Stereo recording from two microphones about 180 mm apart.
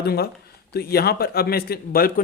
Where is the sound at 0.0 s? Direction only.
60° left (ahead or behind).